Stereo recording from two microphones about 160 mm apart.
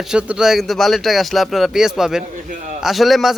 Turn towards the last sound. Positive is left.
turn(degrees=0)  # may be behind; listen again after turning